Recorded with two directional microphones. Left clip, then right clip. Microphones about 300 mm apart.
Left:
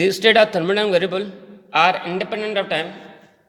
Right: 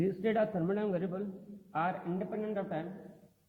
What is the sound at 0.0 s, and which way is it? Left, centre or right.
A woman's voice, centre.